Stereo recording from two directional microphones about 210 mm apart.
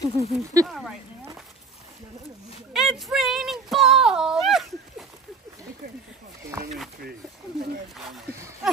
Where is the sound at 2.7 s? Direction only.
Centre (ahead or behind).